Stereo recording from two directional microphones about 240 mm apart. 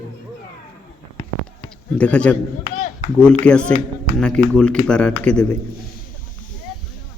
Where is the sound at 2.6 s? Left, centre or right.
Left.